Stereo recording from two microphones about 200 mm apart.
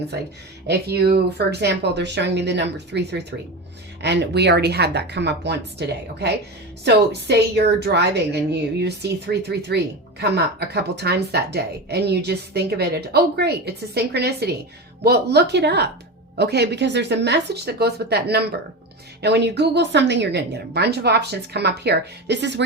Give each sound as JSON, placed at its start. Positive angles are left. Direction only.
{"t": 0.7, "sound": "a woman's voice", "side_deg": -55}
{"t": 6.8, "sound": "a woman's voice", "side_deg": -55}